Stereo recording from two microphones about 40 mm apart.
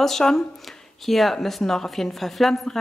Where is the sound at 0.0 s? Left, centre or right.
Centre.